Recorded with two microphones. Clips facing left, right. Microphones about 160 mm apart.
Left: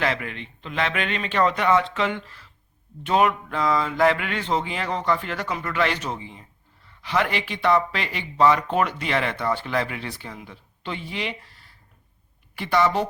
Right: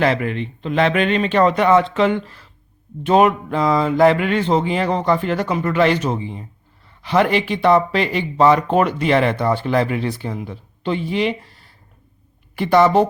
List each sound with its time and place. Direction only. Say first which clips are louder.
0.0 s speech: right 8 dB; 35° right (ahead or behind)
12.5 s speech: right 7 dB; 40° right (ahead or behind)